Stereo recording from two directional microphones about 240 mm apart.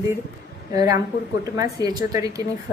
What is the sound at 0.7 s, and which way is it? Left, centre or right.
Speech, centre.